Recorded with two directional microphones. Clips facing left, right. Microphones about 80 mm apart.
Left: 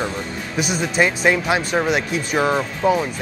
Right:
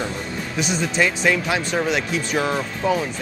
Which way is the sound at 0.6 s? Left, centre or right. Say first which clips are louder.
Left 2 dB; centre.